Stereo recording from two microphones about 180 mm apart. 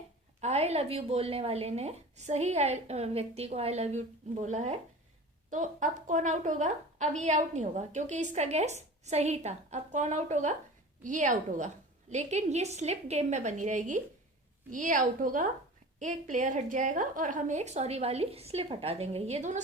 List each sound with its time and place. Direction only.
0.4 s a woman's voice: 35° right (ahead or behind)